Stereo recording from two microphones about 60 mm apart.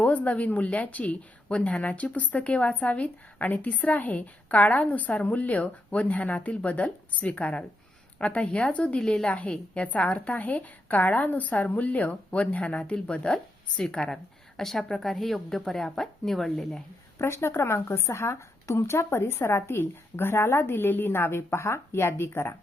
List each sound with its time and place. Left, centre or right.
0.0 s a woman's voice: left
9.0 s a woman's voice: centre
9.4 s speech: left; by 16.8 s centre
17.2 s a woman's voice: left